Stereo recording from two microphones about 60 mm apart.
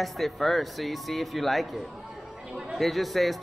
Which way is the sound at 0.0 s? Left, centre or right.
Centre.